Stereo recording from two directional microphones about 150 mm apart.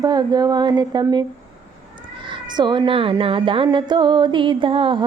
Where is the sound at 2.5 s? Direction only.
30° right (ahead or behind).